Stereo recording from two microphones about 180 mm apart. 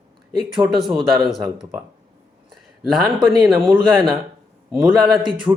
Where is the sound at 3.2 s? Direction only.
25° right (ahead or behind).